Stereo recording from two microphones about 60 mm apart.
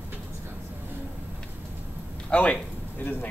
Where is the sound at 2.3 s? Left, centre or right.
Left.